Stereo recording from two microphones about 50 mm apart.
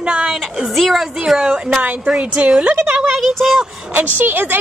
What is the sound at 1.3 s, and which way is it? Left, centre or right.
A woman's voice, centre.